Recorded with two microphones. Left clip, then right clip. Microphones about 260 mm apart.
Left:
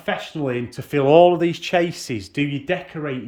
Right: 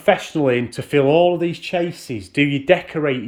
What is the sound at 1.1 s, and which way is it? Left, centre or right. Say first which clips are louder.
Speech: left 5 dB; centre.